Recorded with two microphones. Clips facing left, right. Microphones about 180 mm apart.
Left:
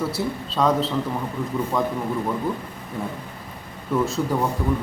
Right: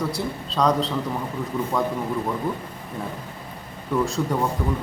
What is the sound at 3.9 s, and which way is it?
Speech, centre (ahead or behind).